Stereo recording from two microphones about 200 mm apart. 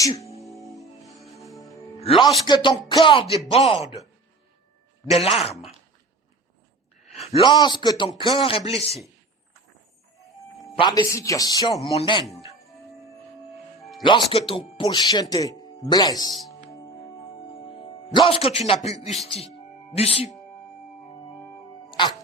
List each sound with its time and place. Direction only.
0.0 s speech: 15° left (ahead or behind)
0.4 s music: centre (ahead or behind)
2.0 s a man's voice: 25° left (ahead or behind)
5.0 s speech: 30° left (ahead or behind)
7.0 s speech: 30° left (ahead or behind)
10.8 s speech: 20° left (ahead or behind)
11.7 s speech: 30° left (ahead or behind)
14.3 s speech: 30° left (ahead or behind)
17.5 s a man's voice: 25° left (ahead or behind)
21.8 s music: 25° left (ahead or behind)